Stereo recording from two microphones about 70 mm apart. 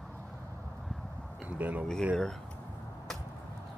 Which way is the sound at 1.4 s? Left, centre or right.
Right.